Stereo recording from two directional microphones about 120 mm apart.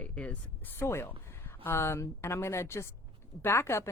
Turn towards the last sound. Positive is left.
turn(degrees=20)  # may be behind; listen again after turning